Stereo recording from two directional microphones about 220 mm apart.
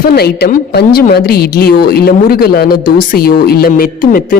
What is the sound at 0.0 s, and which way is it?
A woman's voice, 45° left (ahead or behind).